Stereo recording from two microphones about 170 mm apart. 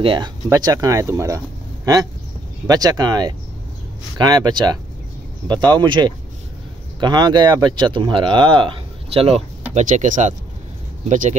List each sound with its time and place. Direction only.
0.0 s speech: 30° right (ahead or behind)
2.6 s speech: 20° right (ahead or behind); by 11.3 s 45° right (ahead or behind)